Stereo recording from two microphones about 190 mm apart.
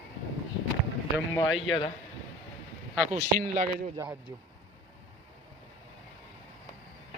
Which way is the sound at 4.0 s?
10° right (ahead or behind).